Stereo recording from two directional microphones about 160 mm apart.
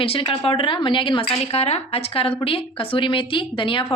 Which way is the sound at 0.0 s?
35° left (ahead or behind).